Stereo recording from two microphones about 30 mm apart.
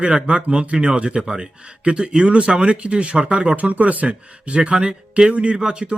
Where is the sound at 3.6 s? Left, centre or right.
Right.